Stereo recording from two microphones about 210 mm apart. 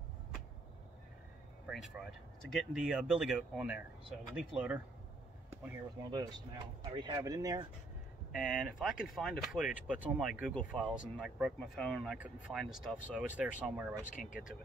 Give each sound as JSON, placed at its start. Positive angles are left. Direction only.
{"t": 1.7, "sound": "speech", "side_deg": 0}
{"t": 5.5, "sound": "speech", "side_deg": -15}
{"t": 8.4, "sound": "speech", "side_deg": -5}